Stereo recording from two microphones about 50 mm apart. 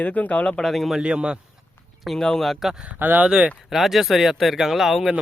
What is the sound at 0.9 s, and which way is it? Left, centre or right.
Speech, right.